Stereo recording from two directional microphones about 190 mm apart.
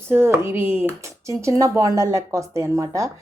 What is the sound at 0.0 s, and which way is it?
Speech, 10° right (ahead or behind).